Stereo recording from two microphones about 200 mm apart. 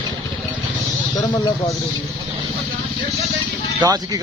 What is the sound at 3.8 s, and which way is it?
Speech, 20° right (ahead or behind).